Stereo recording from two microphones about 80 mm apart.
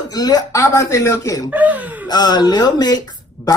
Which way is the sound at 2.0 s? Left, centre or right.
Left.